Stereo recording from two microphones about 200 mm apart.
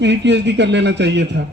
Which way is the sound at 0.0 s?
60° right (ahead or behind).